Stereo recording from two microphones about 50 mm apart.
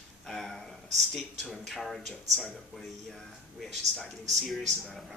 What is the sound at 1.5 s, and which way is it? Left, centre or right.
Speech, centre.